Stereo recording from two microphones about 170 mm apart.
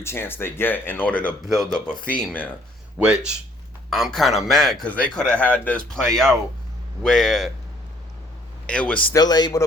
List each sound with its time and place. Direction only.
0.0 s speech: 15° left (ahead or behind)
3.0 s speech: 5° right (ahead or behind)
8.6 s speech: 5° left (ahead or behind)
9.1 s speech: 25° left (ahead or behind)